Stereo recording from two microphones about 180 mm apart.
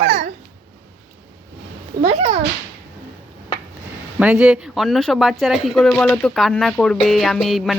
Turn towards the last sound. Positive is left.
turn(degrees=0)  # may be behind; listen again after turning